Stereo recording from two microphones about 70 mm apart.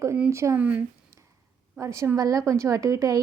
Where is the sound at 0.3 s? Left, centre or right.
Right.